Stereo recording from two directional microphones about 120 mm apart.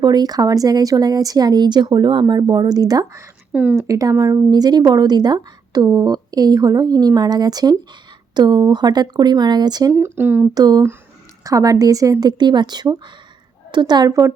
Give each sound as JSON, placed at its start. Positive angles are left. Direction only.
{"t": 0.0, "sound": "a woman's voice", "side_deg": -35}
{"t": 3.5, "sound": "speech", "side_deg": -15}
{"t": 3.8, "sound": "a woman's voice", "side_deg": -25}
{"t": 9.9, "sound": "speech", "side_deg": -20}
{"t": 10.5, "sound": "a woman's voice", "side_deg": -35}